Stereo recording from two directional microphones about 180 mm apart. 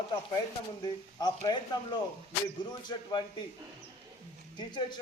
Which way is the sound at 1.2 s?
20° left (ahead or behind).